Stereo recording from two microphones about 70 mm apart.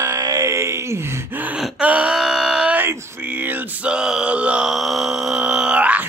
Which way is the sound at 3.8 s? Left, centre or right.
Centre.